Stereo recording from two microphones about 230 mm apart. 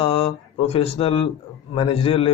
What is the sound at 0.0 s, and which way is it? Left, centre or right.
A man's voice, left.